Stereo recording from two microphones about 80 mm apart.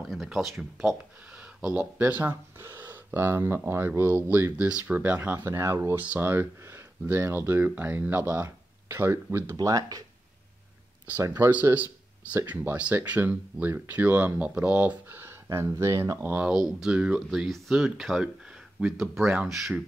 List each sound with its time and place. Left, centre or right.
0.0 s speech: centre
1.7 s speech: centre
5.5 s speech: right
9.6 s speech: right
11.7 s a sound: centre
12.4 s speech: centre; by 16.3 s right
16.3 s speech: centre
16.5 s speech: centre